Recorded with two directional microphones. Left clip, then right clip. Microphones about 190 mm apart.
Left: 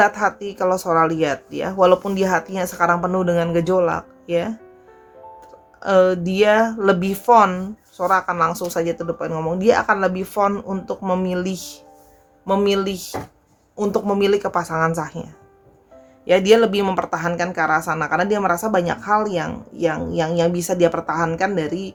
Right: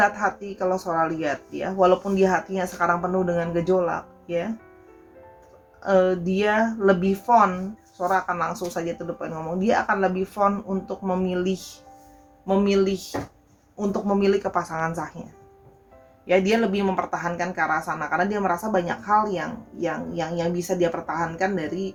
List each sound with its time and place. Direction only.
0.0 s speech: 40° left (ahead or behind)
5.8 s speech: 40° left (ahead or behind)
16.2 s speech: 50° left (ahead or behind)